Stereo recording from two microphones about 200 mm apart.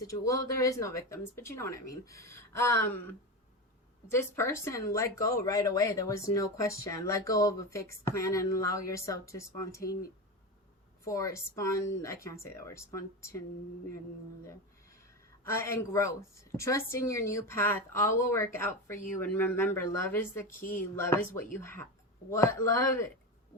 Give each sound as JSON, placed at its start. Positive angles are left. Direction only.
{"t": 0.1, "sound": "speech", "side_deg": 15}
{"t": 11.0, "sound": "speech", "side_deg": 15}
{"t": 15.4, "sound": "speech", "side_deg": 15}